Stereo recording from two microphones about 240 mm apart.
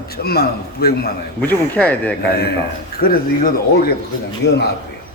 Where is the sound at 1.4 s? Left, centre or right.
Centre.